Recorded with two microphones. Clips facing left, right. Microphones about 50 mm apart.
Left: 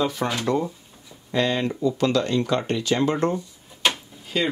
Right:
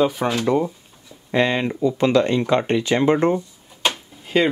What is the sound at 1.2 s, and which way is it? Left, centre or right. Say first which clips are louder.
Speech: right 3 dB; right.